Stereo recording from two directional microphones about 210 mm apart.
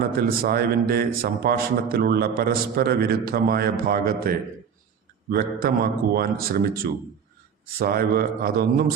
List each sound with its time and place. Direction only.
0.2 s a man's voice: 45° right (ahead or behind)